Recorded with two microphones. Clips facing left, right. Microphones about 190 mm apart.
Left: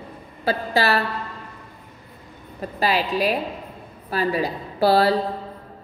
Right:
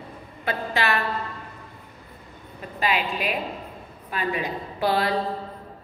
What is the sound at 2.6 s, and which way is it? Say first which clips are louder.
A woman's voice: left 3 dB; 35° left (ahead or behind).